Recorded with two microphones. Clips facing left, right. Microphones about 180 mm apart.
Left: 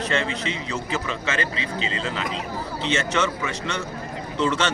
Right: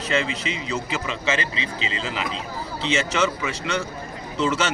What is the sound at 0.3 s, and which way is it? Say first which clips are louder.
A man's voice: even; 35° left (ahead or behind).